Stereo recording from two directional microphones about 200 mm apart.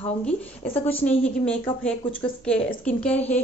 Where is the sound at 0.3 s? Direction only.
30° left (ahead or behind).